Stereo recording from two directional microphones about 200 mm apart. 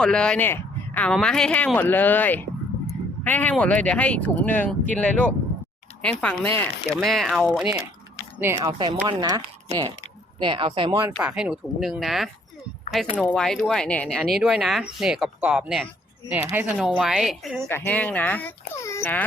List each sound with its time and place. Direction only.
0.0 s speech: 5° left (ahead or behind)
8.4 s speech: 15° right (ahead or behind)
10.4 s speech: 25° right (ahead or behind)
11.2 s speech: 5° right (ahead or behind)
17.7 s speech: 10° left (ahead or behind)